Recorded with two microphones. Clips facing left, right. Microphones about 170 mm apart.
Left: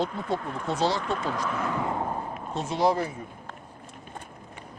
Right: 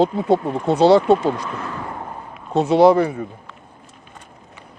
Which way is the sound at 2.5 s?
65° right (ahead or behind).